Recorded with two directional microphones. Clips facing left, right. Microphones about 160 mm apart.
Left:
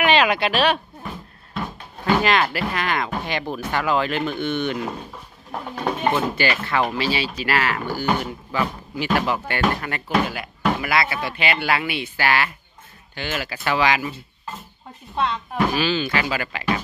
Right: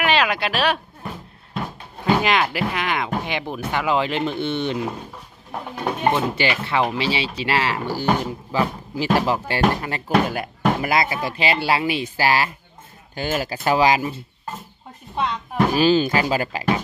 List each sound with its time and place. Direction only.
0.0 s speech: centre (ahead or behind)
2.0 s speech: 15° right (ahead or behind)
5.5 s speech: 5° right (ahead or behind)
6.3 s speech: 25° right (ahead or behind)
10.2 s speech: 45° right (ahead or behind)
15.7 s speech: 40° right (ahead or behind)